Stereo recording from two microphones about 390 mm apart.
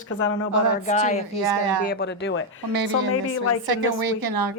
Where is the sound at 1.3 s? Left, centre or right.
Right.